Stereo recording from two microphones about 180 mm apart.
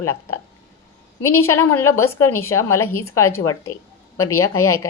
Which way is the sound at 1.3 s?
15° left (ahead or behind).